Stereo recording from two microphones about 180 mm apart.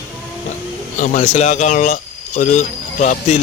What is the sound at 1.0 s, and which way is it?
Speech, 40° left (ahead or behind).